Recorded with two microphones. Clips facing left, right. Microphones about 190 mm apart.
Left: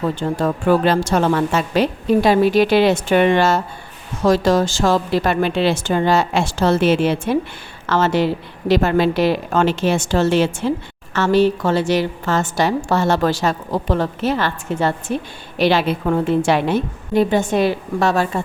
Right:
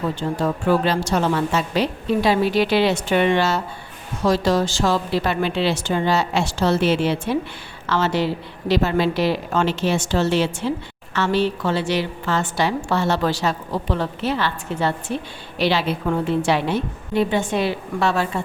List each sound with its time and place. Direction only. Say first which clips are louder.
0.2 s a woman's voice: left 3 dB; 50° left (ahead or behind)